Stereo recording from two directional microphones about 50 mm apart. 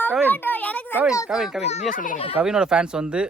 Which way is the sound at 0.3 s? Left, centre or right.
Left.